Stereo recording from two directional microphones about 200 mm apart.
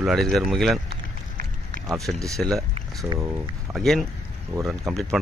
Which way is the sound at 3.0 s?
15° right (ahead or behind).